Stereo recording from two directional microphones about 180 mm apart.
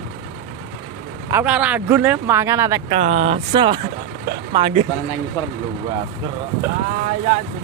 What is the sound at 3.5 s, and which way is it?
Speech, 30° right (ahead or behind).